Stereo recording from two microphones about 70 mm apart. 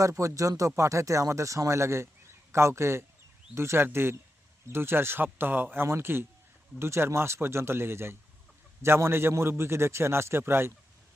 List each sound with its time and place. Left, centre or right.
0.0 s a man's voice: right